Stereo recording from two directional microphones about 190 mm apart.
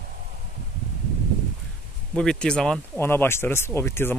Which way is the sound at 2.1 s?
5° left (ahead or behind).